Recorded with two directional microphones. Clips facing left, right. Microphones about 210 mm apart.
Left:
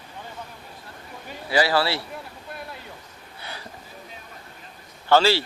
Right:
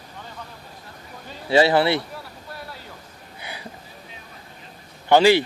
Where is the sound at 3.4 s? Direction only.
10° right (ahead or behind).